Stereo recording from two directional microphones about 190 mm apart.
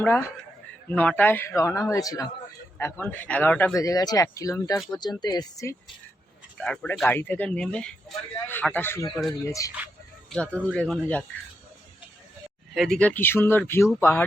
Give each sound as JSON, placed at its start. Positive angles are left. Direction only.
{"t": 0.0, "sound": "speech", "side_deg": 10}
{"t": 3.8, "sound": "speech", "side_deg": 20}
{"t": 6.6, "sound": "speech", "side_deg": 0}
{"t": 10.2, "sound": "speech", "side_deg": 5}
{"t": 12.7, "sound": "speech", "side_deg": 0}